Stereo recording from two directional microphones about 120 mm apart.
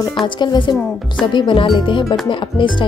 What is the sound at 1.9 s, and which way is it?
Speech, 45° left (ahead or behind).